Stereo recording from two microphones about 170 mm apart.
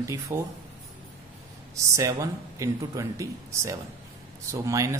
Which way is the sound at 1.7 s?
20° right (ahead or behind).